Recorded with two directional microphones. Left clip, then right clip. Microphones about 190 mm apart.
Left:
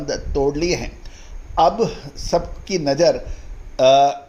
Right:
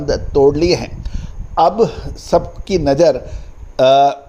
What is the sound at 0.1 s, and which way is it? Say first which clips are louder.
Speech: right 9 dB; 40° right (ahead or behind).